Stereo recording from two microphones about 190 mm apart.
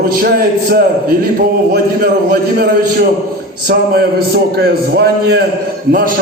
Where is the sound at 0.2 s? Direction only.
50° right (ahead or behind).